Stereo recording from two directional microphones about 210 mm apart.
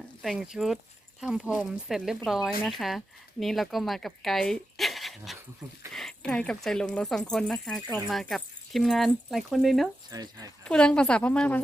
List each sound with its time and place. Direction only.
0.2 s speech: centre (ahead or behind)
10.1 s speech: 15° right (ahead or behind)
10.6 s speech: 5° left (ahead or behind)